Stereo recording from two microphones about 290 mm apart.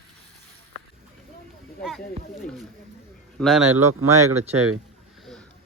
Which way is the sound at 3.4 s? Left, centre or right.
Centre.